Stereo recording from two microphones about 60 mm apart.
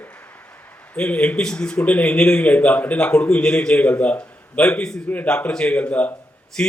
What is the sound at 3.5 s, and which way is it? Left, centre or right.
Speech, centre.